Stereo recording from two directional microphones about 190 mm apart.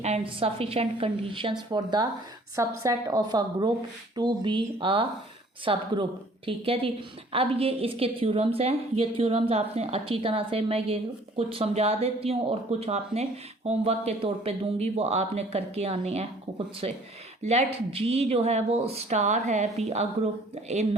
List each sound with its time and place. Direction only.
0.0 s a woman's voice: 30° right (ahead or behind)